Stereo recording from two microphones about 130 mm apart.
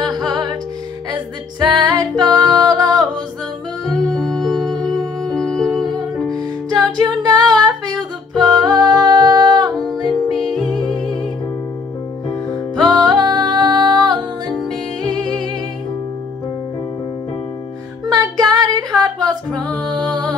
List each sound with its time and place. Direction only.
0.0 s music: 30° right (ahead or behind)
1.8 s music: 30° right (ahead or behind)
3.9 s music: 5° left (ahead or behind)
5.9 s music: 30° right (ahead or behind)
12.3 s music: 5° left (ahead or behind)
12.8 s music: 30° right (ahead or behind)
18.0 s music: 30° right (ahead or behind)